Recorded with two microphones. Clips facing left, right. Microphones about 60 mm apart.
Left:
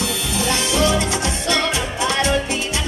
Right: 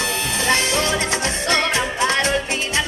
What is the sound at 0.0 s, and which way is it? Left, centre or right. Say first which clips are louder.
Music: even; right.